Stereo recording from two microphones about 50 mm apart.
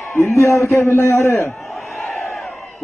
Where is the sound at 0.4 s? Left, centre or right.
Left.